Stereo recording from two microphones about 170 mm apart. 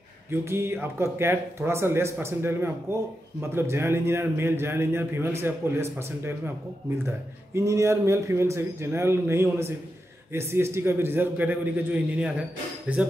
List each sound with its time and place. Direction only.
0.3 s a man's voice: 15° right (ahead or behind)